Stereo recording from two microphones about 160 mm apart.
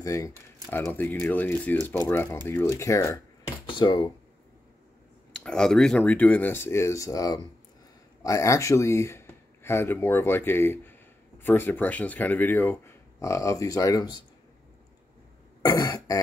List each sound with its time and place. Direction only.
0.0 s speech: 20° left (ahead or behind)
5.4 s speech: 5° left (ahead or behind); by 14.2 s 25° left (ahead or behind)
15.6 s throat clearing: 25° left (ahead or behind)